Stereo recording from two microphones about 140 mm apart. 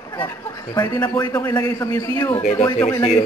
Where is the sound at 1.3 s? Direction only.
15° left (ahead or behind).